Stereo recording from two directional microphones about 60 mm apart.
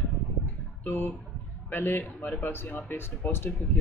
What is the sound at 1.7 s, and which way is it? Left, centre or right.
A man's voice, left.